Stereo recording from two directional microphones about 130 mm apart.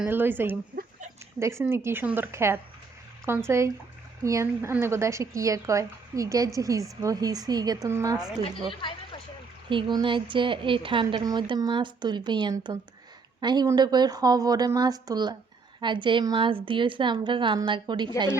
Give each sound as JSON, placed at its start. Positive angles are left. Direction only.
{"t": 0.1, "sound": "a woman's voice", "side_deg": -15}
{"t": 8.7, "sound": "a sound", "side_deg": 40}
{"t": 9.6, "sound": "a woman's voice", "side_deg": -40}